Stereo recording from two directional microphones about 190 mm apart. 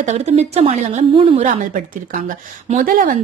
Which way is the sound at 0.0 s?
35° right (ahead or behind).